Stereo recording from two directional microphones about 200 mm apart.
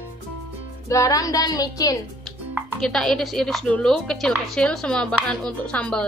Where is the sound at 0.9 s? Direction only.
15° left (ahead or behind).